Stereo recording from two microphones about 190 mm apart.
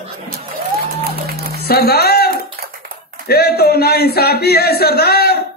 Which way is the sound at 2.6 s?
50° right (ahead or behind).